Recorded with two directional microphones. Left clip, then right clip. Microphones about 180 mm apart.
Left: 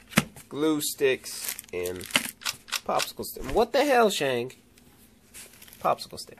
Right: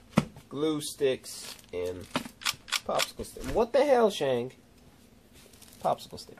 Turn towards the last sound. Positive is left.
turn(degrees=30)  # may be behind; listen again after turning